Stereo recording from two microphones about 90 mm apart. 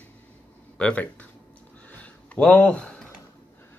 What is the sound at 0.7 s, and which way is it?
Speech, 15° left (ahead or behind).